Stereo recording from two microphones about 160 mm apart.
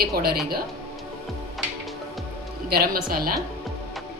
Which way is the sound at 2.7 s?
70° right (ahead or behind).